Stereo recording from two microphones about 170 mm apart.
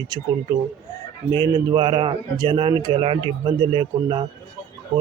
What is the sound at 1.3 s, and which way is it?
Speech, 25° right (ahead or behind).